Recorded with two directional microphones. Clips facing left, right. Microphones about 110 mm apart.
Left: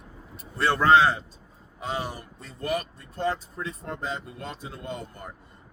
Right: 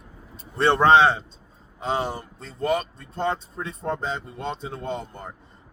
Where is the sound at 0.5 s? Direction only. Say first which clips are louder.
Right 3 dB; 25° right (ahead or behind).